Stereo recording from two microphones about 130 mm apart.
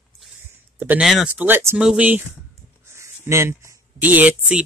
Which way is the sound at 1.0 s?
Centre (ahead or behind).